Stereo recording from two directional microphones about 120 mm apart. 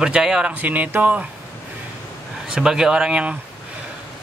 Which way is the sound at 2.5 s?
5° right (ahead or behind).